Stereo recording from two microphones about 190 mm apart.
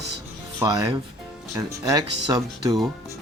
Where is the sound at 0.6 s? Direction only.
20° right (ahead or behind).